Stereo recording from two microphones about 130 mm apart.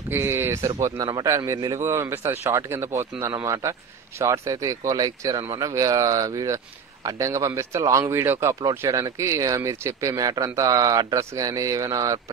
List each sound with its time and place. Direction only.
0.1 s speech: 20° right (ahead or behind)